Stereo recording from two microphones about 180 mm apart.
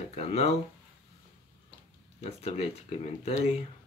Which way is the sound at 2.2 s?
35° left (ahead or behind).